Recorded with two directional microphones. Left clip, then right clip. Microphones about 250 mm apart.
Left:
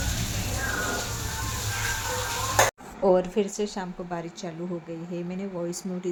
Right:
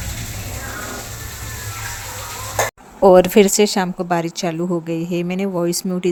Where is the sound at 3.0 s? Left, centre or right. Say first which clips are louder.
Right 12 dB; right.